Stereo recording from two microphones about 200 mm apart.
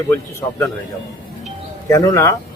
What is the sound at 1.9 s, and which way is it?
Speech, 15° left (ahead or behind).